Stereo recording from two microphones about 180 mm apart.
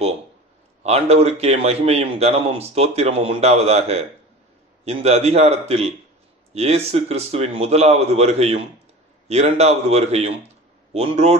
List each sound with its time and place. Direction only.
0.8 s a man's voice: 35° right (ahead or behind)